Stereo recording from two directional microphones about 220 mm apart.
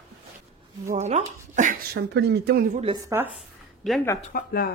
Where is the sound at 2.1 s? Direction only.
50° right (ahead or behind).